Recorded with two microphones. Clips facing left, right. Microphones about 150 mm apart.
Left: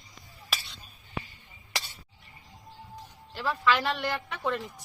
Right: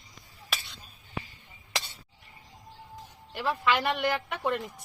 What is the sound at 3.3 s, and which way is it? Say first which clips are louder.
Speech: even; 15° right (ahead or behind).